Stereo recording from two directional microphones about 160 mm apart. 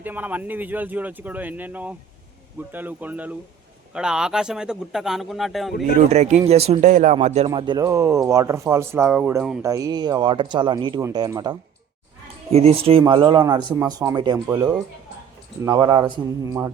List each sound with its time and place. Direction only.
0.0 s speech: 10° right (ahead or behind)
6.0 s speech: 45° right (ahead or behind)
7.5 s speech: 30° right (ahead or behind); by 9.6 s 10° right (ahead or behind)
9.6 s speech: 20° right (ahead or behind)
12.5 s speech: 40° right (ahead or behind); by 16.7 s 20° right (ahead or behind)